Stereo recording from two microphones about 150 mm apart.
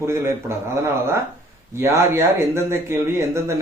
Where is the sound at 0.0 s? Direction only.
15° right (ahead or behind).